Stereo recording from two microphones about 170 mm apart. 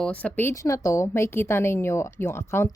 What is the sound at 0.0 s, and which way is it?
A woman's voice, 10° left (ahead or behind).